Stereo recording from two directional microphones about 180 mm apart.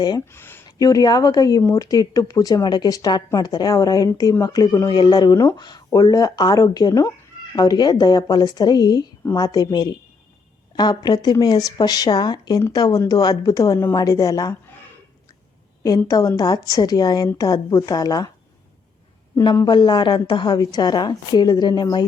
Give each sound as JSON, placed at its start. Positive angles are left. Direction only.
{"t": 0.0, "sound": "speech", "side_deg": 15}
{"t": 15.8, "sound": "speech", "side_deg": 20}
{"t": 19.4, "sound": "speech", "side_deg": 25}